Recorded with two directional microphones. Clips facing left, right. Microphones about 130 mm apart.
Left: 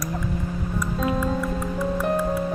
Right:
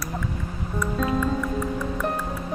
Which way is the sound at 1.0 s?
10° left (ahead or behind).